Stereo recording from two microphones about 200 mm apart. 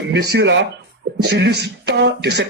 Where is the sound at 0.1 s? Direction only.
55° right (ahead or behind).